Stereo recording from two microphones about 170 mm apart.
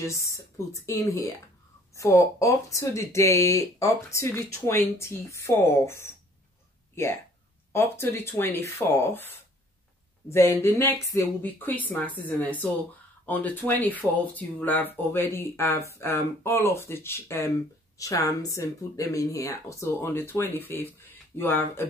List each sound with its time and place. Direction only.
0.0 s speech: 20° left (ahead or behind)
7.7 s speech: 15° left (ahead or behind)